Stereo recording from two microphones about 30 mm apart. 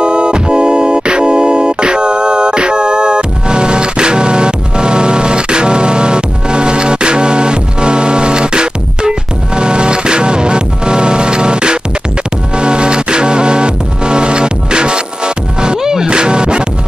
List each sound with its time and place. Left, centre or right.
0.0 s music: right
16.1 s music: right